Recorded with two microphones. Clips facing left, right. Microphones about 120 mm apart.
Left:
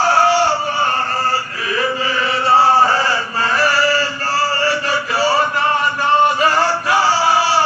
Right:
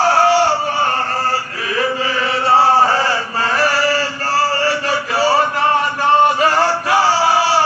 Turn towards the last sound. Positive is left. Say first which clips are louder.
# right 1 dB
turn(degrees=-75)  # may be behind; listen again after turning